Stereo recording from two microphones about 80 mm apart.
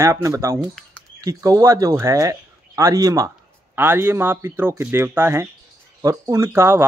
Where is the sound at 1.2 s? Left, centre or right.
Right.